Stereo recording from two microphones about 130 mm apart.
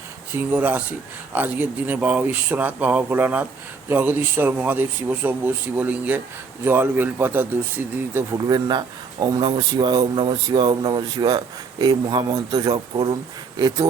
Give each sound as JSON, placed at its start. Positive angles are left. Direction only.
{"t": 0.3, "sound": "speech", "side_deg": -15}
{"t": 8.4, "sound": "speech", "side_deg": -30}